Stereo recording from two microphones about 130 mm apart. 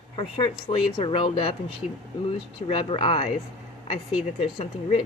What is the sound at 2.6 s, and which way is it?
Speech, 45° left (ahead or behind).